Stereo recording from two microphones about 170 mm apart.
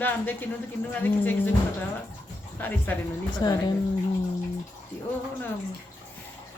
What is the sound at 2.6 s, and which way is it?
Speech, 10° left (ahead or behind).